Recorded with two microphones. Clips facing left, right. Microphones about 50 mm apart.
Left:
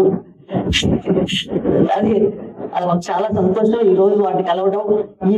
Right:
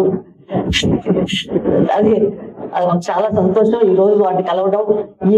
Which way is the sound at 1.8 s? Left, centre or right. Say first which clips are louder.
Right 2 dB; right.